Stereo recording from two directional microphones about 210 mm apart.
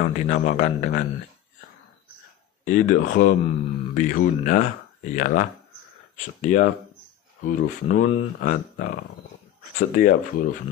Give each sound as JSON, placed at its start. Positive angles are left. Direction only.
{"t": 0.0, "sound": "speech", "side_deg": 40}
{"t": 2.6, "sound": "speech", "side_deg": 40}
{"t": 6.4, "sound": "speech", "side_deg": 35}